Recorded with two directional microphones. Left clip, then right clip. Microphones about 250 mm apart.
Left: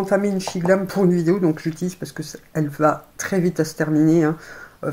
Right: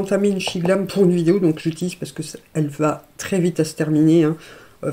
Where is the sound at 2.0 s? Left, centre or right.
Right.